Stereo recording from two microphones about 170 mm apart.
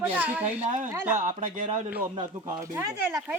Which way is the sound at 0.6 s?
45° right (ahead or behind).